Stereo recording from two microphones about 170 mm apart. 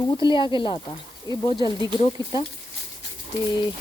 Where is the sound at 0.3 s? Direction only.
30° left (ahead or behind).